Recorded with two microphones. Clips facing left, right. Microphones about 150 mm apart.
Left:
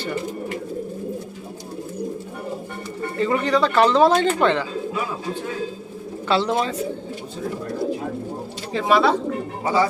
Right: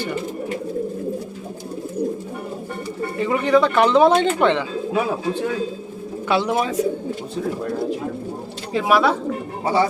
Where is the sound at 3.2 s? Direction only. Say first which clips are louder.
Right 2 dB; 15° right (ahead or behind).